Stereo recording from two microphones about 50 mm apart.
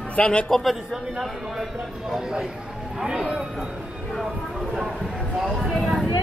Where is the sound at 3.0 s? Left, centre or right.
Centre.